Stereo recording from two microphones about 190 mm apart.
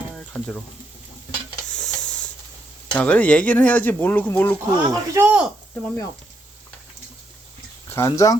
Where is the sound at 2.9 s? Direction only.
5° left (ahead or behind).